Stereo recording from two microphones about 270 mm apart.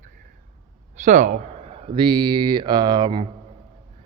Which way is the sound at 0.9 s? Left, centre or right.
Right.